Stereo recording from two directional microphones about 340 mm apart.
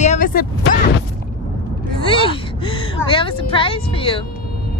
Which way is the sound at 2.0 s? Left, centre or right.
Centre.